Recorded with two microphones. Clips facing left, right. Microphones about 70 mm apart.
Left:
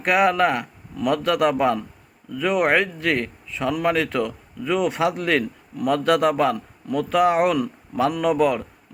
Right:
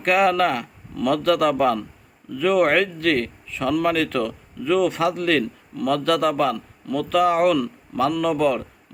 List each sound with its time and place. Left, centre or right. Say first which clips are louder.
0.0 s a man's voice: even; centre